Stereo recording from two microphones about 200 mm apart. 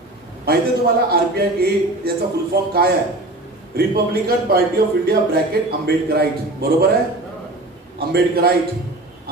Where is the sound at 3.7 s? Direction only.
50° right (ahead or behind).